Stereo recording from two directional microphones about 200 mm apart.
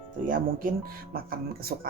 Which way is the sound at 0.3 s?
45° right (ahead or behind).